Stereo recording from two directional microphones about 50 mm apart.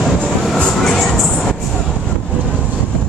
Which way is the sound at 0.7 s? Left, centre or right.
Centre.